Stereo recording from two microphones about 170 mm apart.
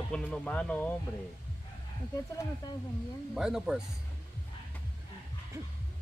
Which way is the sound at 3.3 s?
5° right (ahead or behind).